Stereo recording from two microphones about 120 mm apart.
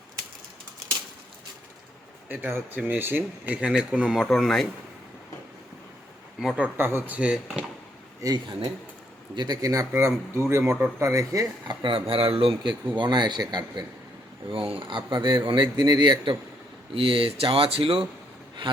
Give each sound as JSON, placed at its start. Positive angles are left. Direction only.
{"t": 2.3, "sound": "speech", "side_deg": -15}
{"t": 6.6, "sound": "speech", "side_deg": -20}
{"t": 8.2, "sound": "speech", "side_deg": -35}
{"t": 11.0, "sound": "speech", "side_deg": -25}
{"t": 11.8, "sound": "speech", "side_deg": -45}
{"t": 13.0, "sound": "speech", "side_deg": -40}
{"t": 14.5, "sound": "speech", "side_deg": -50}